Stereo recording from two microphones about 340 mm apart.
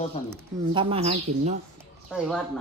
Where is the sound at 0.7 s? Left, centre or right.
Centre.